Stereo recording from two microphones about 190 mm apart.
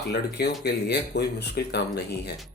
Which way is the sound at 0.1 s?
60° left (ahead or behind).